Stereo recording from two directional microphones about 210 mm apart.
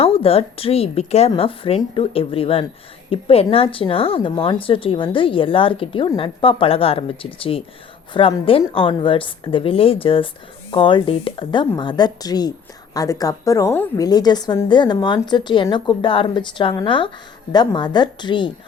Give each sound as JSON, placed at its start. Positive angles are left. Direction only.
{"t": 0.0, "sound": "a woman's voice", "side_deg": 25}